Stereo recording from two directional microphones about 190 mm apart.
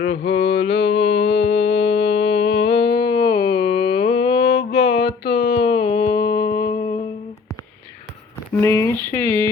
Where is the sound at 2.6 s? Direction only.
25° left (ahead or behind).